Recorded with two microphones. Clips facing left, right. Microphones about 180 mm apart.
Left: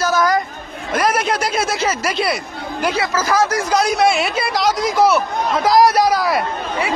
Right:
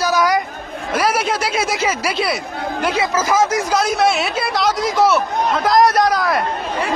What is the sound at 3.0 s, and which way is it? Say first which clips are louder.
Speech: right 1 dB; 20° right (ahead or behind).